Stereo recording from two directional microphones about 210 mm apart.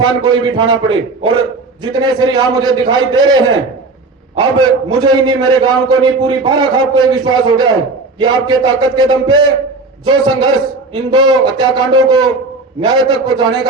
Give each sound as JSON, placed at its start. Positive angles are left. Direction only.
{"t": 0.0, "sound": "a man's voice", "side_deg": -20}